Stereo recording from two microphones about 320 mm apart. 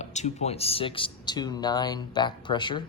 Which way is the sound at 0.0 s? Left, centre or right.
Left.